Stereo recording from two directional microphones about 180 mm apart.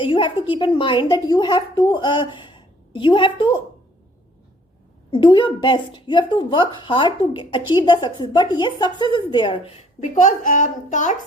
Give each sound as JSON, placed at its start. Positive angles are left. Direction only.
{"t": 0.0, "sound": "a woman's voice", "side_deg": 30}
{"t": 5.1, "sound": "a woman's voice", "side_deg": 25}
{"t": 10.0, "sound": "a woman's voice", "side_deg": 45}